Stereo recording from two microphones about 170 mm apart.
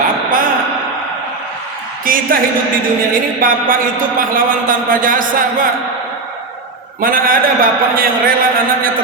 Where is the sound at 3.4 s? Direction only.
55° right (ahead or behind).